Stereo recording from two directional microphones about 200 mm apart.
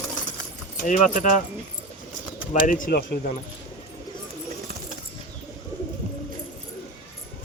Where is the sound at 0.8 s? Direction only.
40° left (ahead or behind).